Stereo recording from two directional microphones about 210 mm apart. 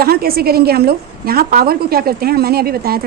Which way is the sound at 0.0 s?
45° right (ahead or behind).